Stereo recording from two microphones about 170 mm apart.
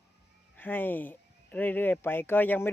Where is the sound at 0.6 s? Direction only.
10° left (ahead or behind).